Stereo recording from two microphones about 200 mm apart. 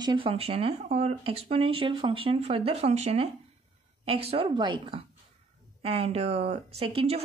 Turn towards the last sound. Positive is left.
turn(degrees=-30)  # may be behind; listen again after turning